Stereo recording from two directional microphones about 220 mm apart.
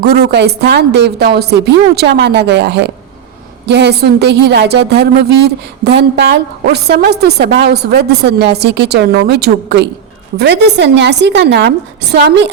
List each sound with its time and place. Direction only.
0.0 s a woman's voice: 45° right (ahead or behind)